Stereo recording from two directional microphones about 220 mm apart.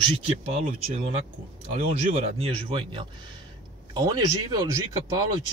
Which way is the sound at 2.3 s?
25° right (ahead or behind).